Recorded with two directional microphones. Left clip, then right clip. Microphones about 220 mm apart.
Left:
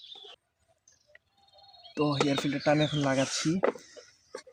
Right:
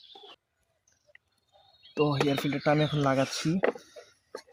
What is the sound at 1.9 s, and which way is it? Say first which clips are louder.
Speech: right 1 dB; 30° right (ahead or behind).